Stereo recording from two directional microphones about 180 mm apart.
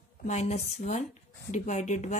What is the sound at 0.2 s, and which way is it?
A woman's voice, 40° left (ahead or behind).